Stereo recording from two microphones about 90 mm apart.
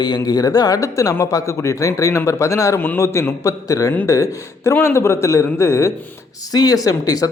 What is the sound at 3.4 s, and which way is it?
Speech, 40° left (ahead or behind).